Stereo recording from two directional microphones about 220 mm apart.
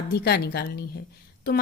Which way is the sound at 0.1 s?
50° left (ahead or behind).